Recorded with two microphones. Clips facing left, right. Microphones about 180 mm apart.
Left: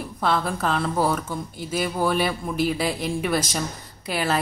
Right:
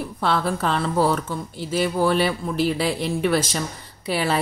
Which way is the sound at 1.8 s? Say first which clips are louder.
Right 3 dB; 10° left (ahead or behind).